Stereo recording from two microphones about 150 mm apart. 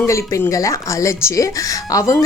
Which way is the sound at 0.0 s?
15° left (ahead or behind).